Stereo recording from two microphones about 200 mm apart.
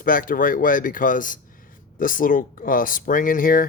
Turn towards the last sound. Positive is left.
turn(degrees=45)  # may be behind; listen again after turning